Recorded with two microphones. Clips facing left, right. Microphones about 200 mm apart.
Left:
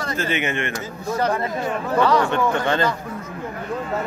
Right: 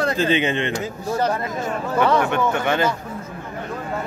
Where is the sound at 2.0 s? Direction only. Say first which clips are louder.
Even; 20° right (ahead or behind).